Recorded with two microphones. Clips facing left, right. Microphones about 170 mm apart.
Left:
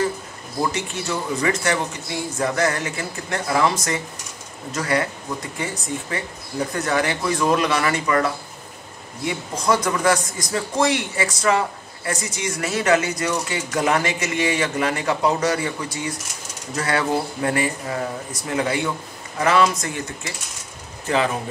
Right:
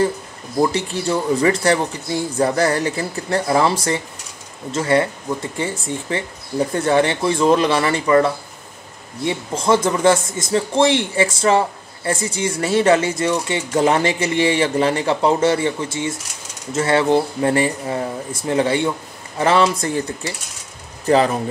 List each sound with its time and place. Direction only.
0.7 s a man's voice: 30° right (ahead or behind)